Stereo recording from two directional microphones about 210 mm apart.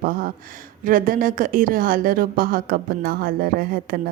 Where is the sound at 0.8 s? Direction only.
40° right (ahead or behind).